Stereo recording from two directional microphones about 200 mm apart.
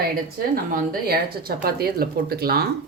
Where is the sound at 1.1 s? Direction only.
50° right (ahead or behind).